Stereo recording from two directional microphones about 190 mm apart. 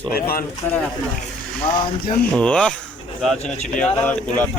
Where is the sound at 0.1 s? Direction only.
50° left (ahead or behind).